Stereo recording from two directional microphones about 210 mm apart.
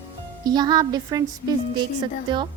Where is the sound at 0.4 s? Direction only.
20° right (ahead or behind).